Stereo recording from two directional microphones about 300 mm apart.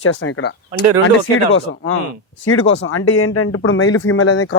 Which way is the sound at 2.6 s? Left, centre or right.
Left.